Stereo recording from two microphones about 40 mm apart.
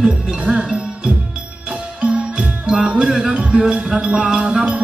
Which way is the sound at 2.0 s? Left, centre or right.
Right.